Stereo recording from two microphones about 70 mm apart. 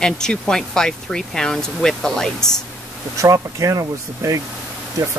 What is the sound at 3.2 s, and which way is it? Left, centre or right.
Speech, right.